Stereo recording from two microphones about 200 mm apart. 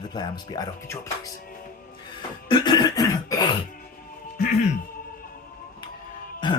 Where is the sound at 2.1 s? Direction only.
20° left (ahead or behind).